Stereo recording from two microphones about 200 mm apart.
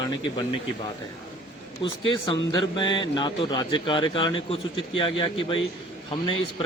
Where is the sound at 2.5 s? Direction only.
25° left (ahead or behind).